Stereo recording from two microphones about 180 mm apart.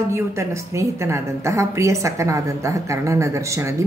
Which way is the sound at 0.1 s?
15° right (ahead or behind).